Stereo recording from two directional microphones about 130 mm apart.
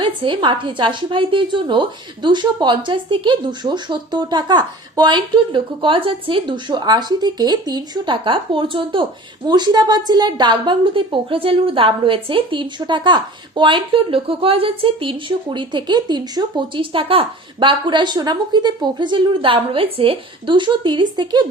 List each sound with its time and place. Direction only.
0.0 s a woman's voice: 40° right (ahead or behind)